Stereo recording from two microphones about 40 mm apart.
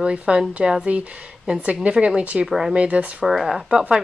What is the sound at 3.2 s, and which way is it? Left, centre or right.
Speech, centre.